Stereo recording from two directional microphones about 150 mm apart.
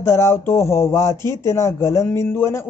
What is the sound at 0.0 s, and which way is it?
A man's voice, 20° left (ahead or behind).